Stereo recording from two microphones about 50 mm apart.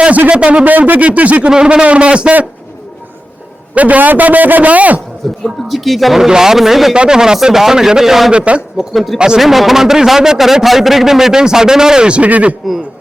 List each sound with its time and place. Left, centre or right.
0.0 s speech: right
0.6 s speech: right
1.5 s speech: centre
3.8 s a man's voice: right
5.5 s speech: centre
6.9 s a man's voice: centre
8.3 s speech: right
8.8 s speech: centre
9.1 s a man's voice: centre
9.4 s a man's voice: centre; by 12.5 s right